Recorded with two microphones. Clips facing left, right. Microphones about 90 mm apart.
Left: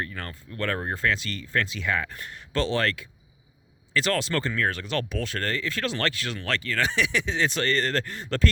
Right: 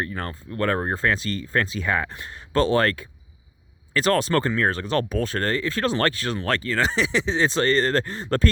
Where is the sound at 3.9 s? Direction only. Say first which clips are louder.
Right 5 dB; 40° right (ahead or behind).